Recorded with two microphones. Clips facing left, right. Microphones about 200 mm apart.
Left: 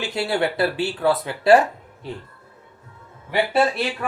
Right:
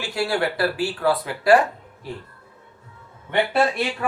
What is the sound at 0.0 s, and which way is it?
Speech, 20° left (ahead or behind).